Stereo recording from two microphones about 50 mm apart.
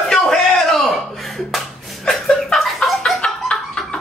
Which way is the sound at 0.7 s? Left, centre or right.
Centre.